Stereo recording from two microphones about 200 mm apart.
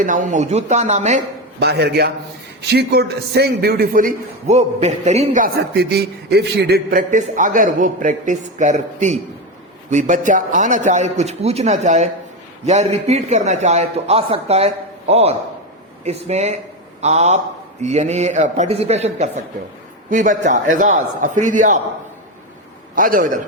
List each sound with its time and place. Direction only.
0.0 s a man's voice: 40° right (ahead or behind)
1.5 s a man's voice: 55° right (ahead or behind); by 21.8 s 40° right (ahead or behind)
23.0 s a man's voice: 45° right (ahead or behind)